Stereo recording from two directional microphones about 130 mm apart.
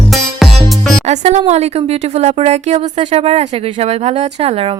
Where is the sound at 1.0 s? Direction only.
60° right (ahead or behind).